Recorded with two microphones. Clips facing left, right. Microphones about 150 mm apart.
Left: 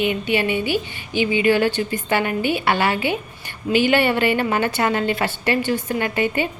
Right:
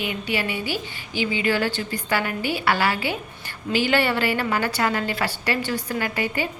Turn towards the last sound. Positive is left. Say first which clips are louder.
# left 4 dB
turn(degrees=20)  # may be behind; listen again after turning